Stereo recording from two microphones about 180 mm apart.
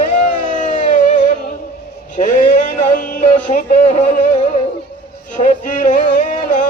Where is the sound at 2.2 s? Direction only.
45° left (ahead or behind).